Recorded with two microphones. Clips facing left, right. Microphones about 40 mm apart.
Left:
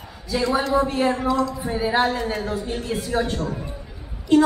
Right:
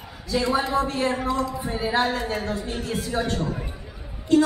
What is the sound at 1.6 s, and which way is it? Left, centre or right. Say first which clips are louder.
A woman's voice: left 3 dB; centre.